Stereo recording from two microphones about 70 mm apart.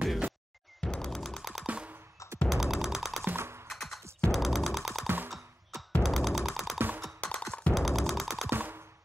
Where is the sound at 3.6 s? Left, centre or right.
Centre.